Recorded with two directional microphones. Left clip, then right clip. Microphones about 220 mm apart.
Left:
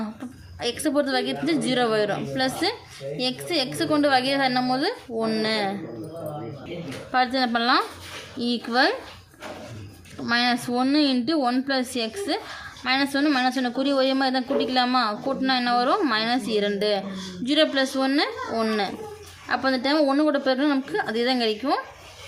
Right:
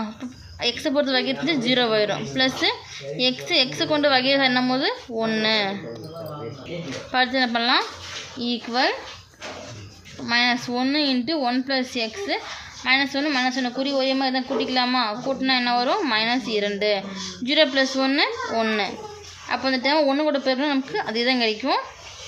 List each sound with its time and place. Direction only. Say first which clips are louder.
0.6 s a woman's voice: right 2 dB; 5° left (ahead or behind)
7.1 s a woman's voice: right 1 dB; 10° left (ahead or behind)
10.2 s a woman's voice: right 2 dB; 20° left (ahead or behind)